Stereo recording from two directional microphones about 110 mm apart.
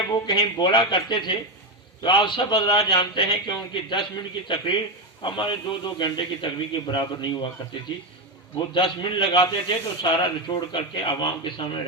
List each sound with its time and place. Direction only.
0.3 s a man's voice: 45° left (ahead or behind)